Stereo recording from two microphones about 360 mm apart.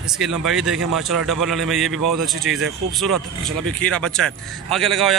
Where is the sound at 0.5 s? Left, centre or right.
Centre.